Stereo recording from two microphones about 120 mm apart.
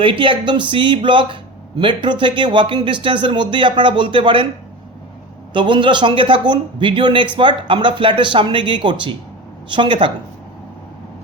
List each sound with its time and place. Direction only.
0.0 s speech: 45° right (ahead or behind)
5.5 s speech: 40° right (ahead or behind)